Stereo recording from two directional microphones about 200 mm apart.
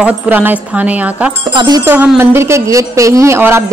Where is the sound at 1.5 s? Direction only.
20° right (ahead or behind).